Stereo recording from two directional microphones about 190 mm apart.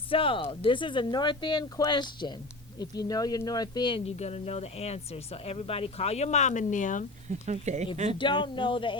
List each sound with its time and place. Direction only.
0.1 s speech: 30° left (ahead or behind)
7.3 s speech: 40° right (ahead or behind)
8.2 s speech: 25° left (ahead or behind)